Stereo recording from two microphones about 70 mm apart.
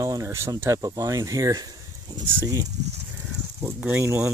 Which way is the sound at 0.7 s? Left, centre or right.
Right.